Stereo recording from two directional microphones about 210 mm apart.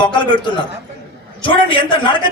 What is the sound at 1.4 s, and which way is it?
Speech, 25° left (ahead or behind).